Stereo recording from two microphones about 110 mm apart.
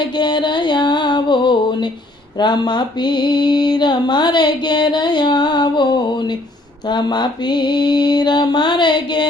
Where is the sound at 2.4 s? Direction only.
40° left (ahead or behind).